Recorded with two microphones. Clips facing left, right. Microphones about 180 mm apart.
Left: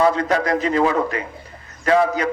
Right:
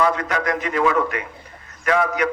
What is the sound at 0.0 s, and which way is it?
A man's voice, 30° left (ahead or behind).